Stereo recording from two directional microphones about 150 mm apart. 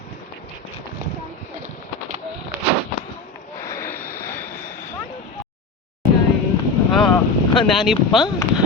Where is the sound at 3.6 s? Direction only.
20° left (ahead or behind).